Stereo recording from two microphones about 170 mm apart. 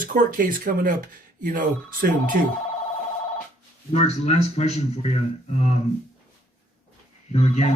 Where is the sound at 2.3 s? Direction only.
55° right (ahead or behind).